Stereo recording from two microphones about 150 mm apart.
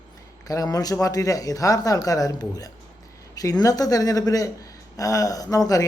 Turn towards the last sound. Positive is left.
turn(degrees=25)  # may be behind; listen again after turning